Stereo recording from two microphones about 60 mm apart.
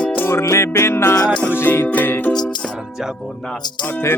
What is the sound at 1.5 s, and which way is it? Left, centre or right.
Music, left.